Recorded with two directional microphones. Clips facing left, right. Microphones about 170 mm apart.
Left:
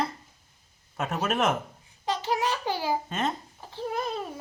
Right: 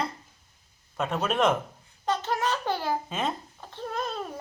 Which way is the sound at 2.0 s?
10° left (ahead or behind).